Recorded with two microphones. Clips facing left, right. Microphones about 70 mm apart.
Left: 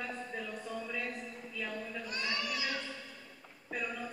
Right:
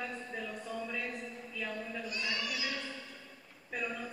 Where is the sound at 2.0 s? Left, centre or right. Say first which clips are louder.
Left 1 dB; left.